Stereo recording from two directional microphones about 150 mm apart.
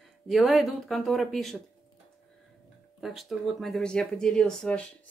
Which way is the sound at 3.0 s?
Centre (ahead or behind).